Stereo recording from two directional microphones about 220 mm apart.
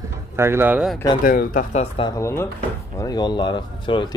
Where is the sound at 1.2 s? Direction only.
40° left (ahead or behind).